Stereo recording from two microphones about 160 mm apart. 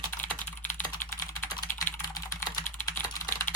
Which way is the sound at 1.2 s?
20° left (ahead or behind).